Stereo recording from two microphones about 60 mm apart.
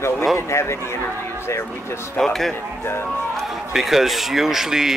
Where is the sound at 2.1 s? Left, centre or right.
Centre.